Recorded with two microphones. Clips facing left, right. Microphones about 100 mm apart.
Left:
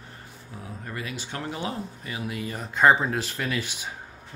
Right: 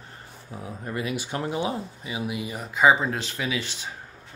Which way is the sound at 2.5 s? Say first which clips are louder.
Even; 5° right (ahead or behind).